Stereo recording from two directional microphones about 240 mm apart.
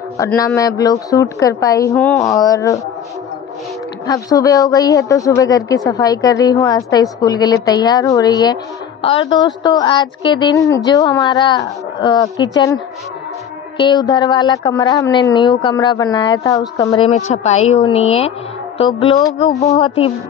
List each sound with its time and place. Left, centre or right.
0.2 s speech: centre
4.1 s a woman's voice: centre
17.1 s a woman's voice: left